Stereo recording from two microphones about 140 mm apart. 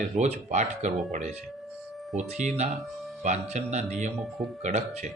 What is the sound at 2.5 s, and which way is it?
A man's voice, 50° right (ahead or behind).